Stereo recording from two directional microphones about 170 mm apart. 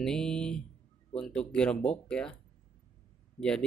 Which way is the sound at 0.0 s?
5° left (ahead or behind).